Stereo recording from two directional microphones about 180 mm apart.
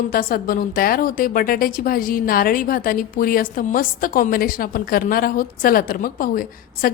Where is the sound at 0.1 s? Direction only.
55° left (ahead or behind).